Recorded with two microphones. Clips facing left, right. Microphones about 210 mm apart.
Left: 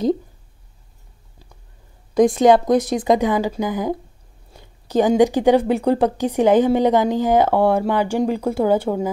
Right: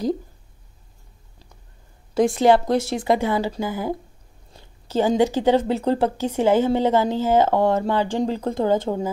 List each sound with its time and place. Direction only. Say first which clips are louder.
2.3 s speech: left 1 dB; 15° left (ahead or behind)